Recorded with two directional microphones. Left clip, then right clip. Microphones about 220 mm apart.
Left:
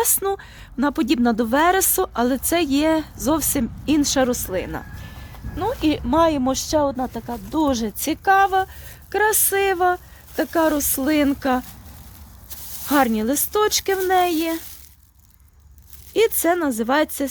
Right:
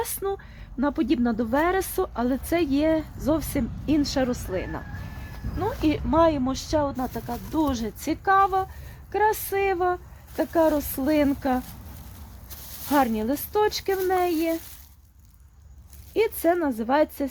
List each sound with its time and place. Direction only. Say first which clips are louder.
0.0 s speech: left 7 dB; 40° left (ahead or behind)
12.9 s speech: left 4 dB; 45° left (ahead or behind)
16.1 s speech: left 4 dB; 45° left (ahead or behind)